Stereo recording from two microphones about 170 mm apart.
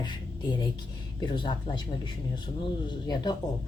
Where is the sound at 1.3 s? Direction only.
30° left (ahead or behind).